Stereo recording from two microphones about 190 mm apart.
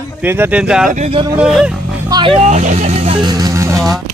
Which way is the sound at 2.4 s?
40° right (ahead or behind).